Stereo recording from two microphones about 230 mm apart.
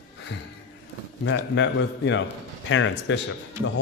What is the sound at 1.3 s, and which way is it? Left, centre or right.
A man's voice, left.